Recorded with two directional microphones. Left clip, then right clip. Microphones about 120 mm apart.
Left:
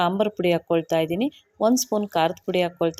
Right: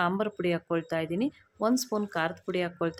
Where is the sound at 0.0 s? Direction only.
30° left (ahead or behind).